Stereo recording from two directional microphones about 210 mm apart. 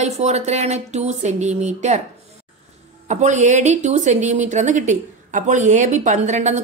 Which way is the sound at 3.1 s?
35° right (ahead or behind).